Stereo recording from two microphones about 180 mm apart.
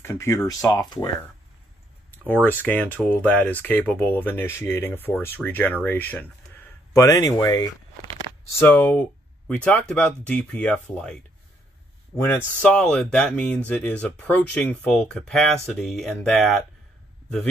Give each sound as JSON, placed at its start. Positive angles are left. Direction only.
{"t": 0.0, "sound": "speech", "side_deg": 15}
{"t": 2.2, "sound": "speech", "side_deg": 10}
{"t": 6.9, "sound": "speech", "side_deg": 20}
{"t": 12.6, "sound": "speech", "side_deg": 5}